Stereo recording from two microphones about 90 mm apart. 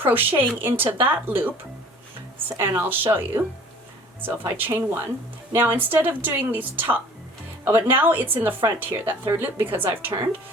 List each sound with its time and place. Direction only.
0.0 s speech: 25° right (ahead or behind)
2.6 s speech: 25° right (ahead or behind)